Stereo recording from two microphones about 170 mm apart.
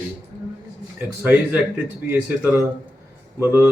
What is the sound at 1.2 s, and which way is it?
Speech, 10° right (ahead or behind).